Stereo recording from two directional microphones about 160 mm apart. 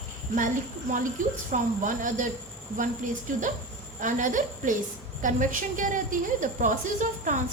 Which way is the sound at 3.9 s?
55° right (ahead or behind).